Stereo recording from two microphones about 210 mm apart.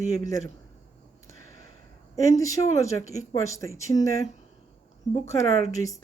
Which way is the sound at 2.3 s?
15° left (ahead or behind).